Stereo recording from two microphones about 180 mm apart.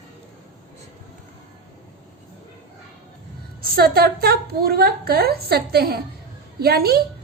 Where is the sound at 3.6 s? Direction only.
60° right (ahead or behind).